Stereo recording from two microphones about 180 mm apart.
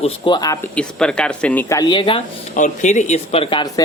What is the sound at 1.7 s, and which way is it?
Speech, 25° left (ahead or behind).